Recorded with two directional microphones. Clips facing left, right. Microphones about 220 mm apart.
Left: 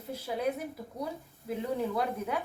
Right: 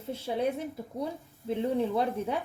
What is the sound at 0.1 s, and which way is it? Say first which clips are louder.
A woman's voice: right 2 dB; 25° right (ahead or behind).